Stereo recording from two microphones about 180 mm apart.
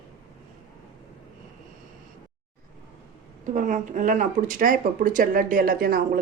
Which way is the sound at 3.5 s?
45° right (ahead or behind).